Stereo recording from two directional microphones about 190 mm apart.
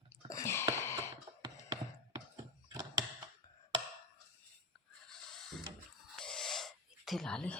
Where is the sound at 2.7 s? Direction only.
15° right (ahead or behind).